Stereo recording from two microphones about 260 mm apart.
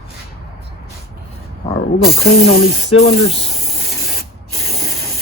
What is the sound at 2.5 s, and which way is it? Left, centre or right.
Speech, left.